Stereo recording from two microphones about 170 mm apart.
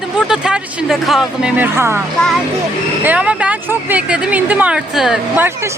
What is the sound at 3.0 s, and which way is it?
Speech, 5° right (ahead or behind).